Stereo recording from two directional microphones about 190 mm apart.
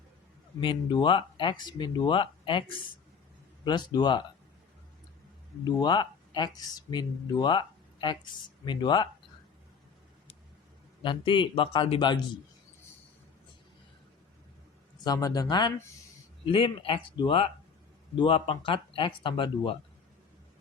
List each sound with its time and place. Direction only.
0.6 s speech: 25° left (ahead or behind)
5.6 s speech: 25° left (ahead or behind)
8.6 s speech: 25° left (ahead or behind)
11.0 s speech: 25° left (ahead or behind)
15.0 s speech: 20° left (ahead or behind)